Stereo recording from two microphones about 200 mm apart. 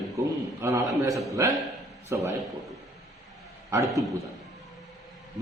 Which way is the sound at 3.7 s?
15° right (ahead or behind).